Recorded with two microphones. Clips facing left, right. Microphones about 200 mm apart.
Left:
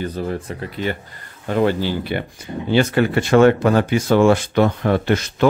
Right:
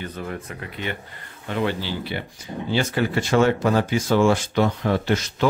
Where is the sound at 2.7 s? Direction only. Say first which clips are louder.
Left 6 dB; 65° left (ahead or behind).